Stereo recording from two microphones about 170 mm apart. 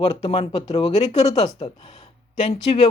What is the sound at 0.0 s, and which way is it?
Speech, 35° left (ahead or behind).